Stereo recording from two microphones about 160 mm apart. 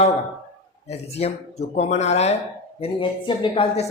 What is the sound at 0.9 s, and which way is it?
Speech, 40° left (ahead or behind).